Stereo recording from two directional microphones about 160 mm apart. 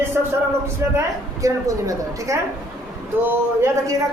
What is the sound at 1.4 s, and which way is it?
A woman's voice, 20° right (ahead or behind).